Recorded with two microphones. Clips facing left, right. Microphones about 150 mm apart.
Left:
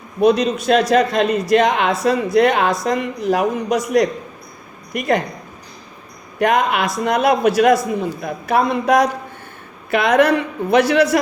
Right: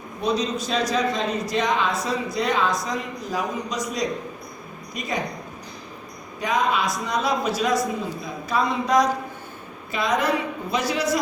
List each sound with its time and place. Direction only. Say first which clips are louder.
0.2 s speech: left 9 dB; 65° left (ahead or behind)
6.4 s a man's voice: left 6 dB; 65° left (ahead or behind)